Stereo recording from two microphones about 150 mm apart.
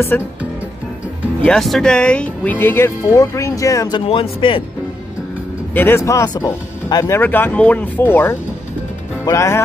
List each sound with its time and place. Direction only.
0.1 s speech: 10° left (ahead or behind)
1.4 s speech: 5° left (ahead or behind); by 4.0 s 20° left (ahead or behind)
4.0 s a man's voice: 35° left (ahead or behind)
5.8 s speech: 15° left (ahead or behind)
7.2 s speech: 15° left (ahead or behind)